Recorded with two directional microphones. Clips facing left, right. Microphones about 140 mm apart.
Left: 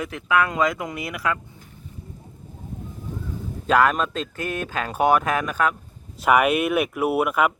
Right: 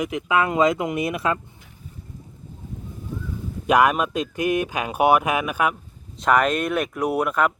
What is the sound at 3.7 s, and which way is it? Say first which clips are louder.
Speech: right 1 dB; 15° right (ahead or behind).